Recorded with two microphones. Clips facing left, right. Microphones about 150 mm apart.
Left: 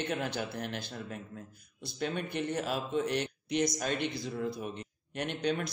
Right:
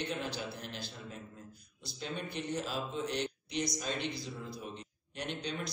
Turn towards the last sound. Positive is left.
turn(degrees=55)  # may be behind; listen again after turning